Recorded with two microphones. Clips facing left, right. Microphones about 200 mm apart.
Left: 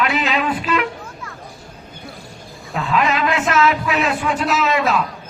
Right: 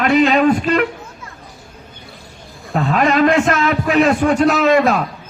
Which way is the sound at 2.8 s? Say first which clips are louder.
Right 5 dB; 45° right (ahead or behind).